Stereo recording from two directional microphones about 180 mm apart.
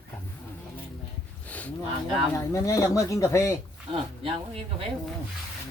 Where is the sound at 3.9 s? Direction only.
30° right (ahead or behind).